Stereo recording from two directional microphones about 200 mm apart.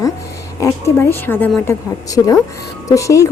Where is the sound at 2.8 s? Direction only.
15° left (ahead or behind).